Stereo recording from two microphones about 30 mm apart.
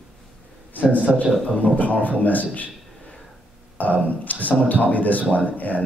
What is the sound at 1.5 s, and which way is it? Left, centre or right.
A man's voice, left.